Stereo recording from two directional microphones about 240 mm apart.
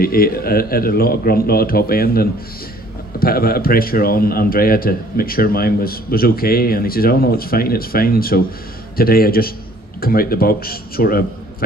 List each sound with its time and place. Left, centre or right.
0.0 s a man's voice: left